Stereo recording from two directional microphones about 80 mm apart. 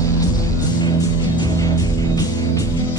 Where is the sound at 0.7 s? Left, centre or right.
Left.